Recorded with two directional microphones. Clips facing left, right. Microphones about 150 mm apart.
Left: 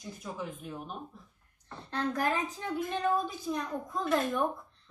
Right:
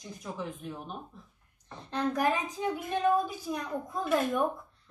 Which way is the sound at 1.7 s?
15° right (ahead or behind).